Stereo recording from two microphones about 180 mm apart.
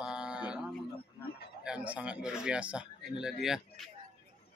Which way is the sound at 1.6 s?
5° right (ahead or behind).